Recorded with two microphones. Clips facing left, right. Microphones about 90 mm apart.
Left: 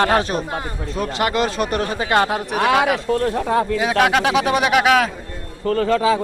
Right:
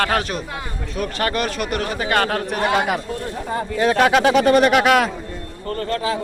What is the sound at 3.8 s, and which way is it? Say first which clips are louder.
A man's voice: right 1 dB; 5° left (ahead or behind).